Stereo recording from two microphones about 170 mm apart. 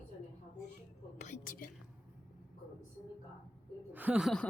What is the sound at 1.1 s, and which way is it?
Whispering, 45° left (ahead or behind).